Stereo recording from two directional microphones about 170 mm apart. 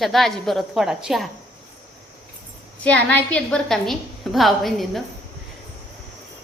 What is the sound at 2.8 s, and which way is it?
A woman's voice, 10° left (ahead or behind).